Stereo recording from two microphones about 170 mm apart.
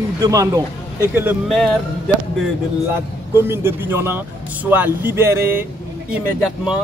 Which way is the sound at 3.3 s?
15° right (ahead or behind).